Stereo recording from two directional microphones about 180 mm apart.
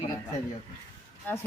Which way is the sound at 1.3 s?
10° left (ahead or behind).